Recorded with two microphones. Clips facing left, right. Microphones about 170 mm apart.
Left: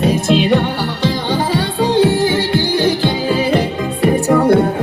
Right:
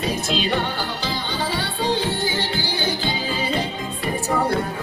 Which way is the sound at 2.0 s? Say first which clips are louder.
Left 11 dB; 70° left (ahead or behind).